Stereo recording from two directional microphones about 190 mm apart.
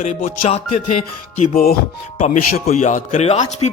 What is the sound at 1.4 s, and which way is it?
Speech, 50° left (ahead or behind).